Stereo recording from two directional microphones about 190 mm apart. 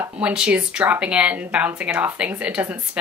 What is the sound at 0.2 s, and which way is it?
A woman's voice, 5° right (ahead or behind).